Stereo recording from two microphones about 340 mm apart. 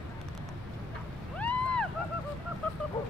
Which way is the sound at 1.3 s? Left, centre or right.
Centre.